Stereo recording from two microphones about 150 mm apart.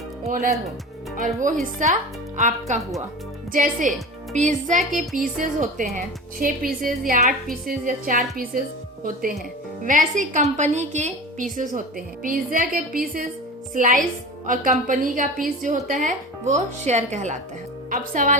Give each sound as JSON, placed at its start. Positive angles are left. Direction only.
{"t": 0.3, "sound": "speech", "side_deg": -70}
{"t": 1.1, "sound": "a woman's voice", "side_deg": -60}
{"t": 9.8, "sound": "a woman's voice", "side_deg": -60}